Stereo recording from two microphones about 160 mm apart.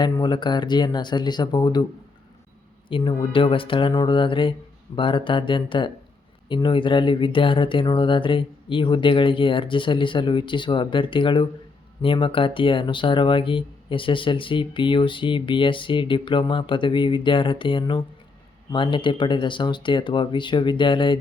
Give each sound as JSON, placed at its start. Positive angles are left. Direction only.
{"t": 0.0, "sound": "speech", "side_deg": 25}
{"t": 2.9, "sound": "speech", "side_deg": 30}